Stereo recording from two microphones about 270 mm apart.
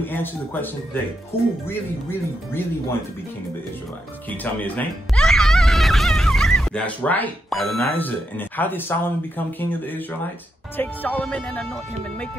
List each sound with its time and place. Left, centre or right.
0.0 s speech: centre
1.7 s speech: centre
4.3 s a child's voice: centre